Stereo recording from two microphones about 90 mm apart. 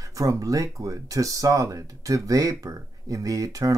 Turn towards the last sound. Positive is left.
turn(degrees=-40)  # may be behind; listen again after turning